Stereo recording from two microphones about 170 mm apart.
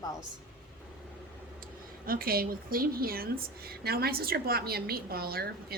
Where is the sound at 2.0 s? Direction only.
60° right (ahead or behind).